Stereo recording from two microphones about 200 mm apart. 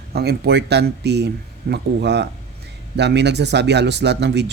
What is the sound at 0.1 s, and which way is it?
Speech, 50° right (ahead or behind).